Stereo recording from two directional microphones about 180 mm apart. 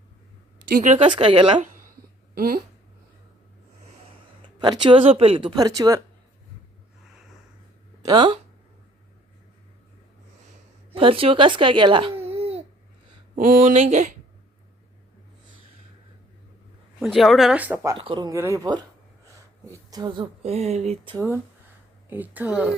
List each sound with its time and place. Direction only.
0.7 s speech: 45° right (ahead or behind)
0.9 s a woman's voice: 30° right (ahead or behind)
2.3 s speech: 55° right (ahead or behind)
4.0 s speech: 25° right (ahead or behind)
8.0 s a woman's voice: 25° right (ahead or behind)
10.9 s a woman's voice: 30° right (ahead or behind)
12.4 s babbling: 35° right (ahead or behind)
13.3 s speech: 45° right (ahead or behind)
17.0 s speech: centre (ahead or behind)
17.9 s speech: 30° right (ahead or behind)
22.1 s speech: 10° right (ahead or behind)